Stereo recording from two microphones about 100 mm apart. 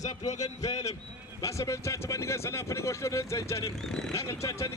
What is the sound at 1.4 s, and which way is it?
Speech, 30° left (ahead or behind).